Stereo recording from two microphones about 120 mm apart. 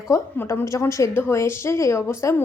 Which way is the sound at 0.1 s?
20° left (ahead or behind).